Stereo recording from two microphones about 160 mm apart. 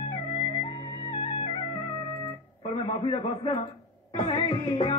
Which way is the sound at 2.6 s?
35° left (ahead or behind).